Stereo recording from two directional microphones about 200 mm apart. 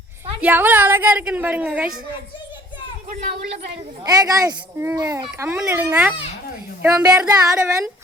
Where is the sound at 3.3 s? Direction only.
55° right (ahead or behind).